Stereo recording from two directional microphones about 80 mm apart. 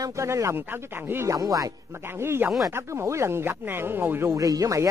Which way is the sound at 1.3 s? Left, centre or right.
Right.